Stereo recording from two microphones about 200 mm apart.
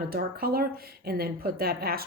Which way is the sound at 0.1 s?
50° right (ahead or behind).